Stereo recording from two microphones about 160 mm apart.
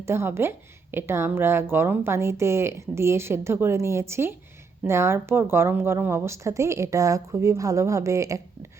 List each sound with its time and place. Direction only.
0.0 s a woman's voice: 15° right (ahead or behind)